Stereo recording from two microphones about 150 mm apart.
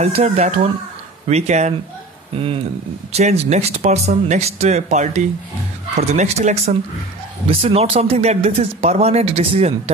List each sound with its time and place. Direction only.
0.0 s speech: 45° right (ahead or behind)